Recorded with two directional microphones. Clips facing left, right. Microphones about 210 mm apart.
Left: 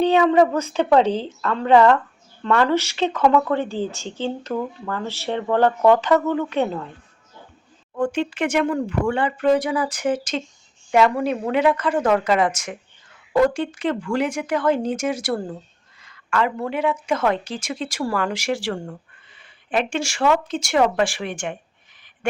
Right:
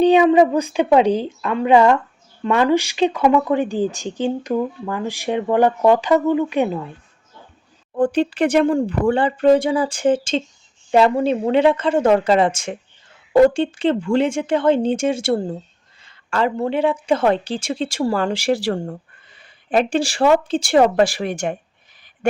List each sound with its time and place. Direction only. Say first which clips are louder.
0.0 s speech: right 3 dB; 15° right (ahead or behind)
7.9 s a woman's voice: right 5 dB; 35° right (ahead or behind)
22.2 s duck: right 4 dB; 40° right (ahead or behind)